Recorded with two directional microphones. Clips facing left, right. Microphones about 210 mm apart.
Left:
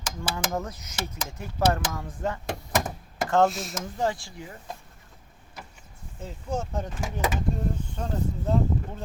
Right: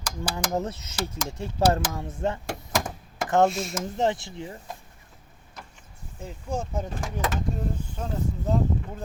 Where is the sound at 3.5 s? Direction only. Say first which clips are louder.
Right 4 dB; centre (ahead or behind).